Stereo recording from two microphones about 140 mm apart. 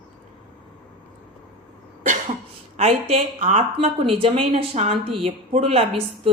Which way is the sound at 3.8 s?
45° right (ahead or behind).